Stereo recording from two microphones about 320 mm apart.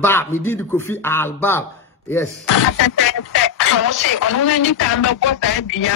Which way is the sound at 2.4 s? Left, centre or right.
Left.